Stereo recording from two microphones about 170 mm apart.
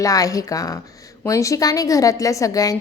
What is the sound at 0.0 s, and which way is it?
A woman's voice, 20° left (ahead or behind).